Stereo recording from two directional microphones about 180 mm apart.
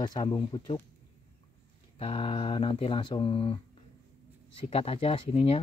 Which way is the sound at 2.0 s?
30° left (ahead or behind).